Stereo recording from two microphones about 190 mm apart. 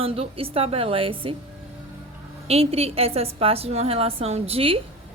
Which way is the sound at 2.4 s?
30° right (ahead or behind).